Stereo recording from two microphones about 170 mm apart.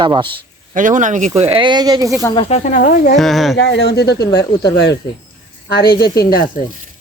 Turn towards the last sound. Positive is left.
turn(degrees=60)  # may be behind; listen again after turning